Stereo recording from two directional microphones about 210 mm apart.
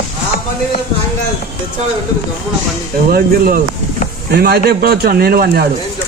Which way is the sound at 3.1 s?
45° right (ahead or behind).